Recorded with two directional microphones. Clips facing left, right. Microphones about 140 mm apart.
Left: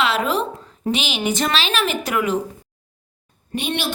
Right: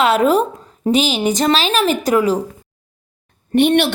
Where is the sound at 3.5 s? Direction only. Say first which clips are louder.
Right 12 dB; 60° right (ahead or behind).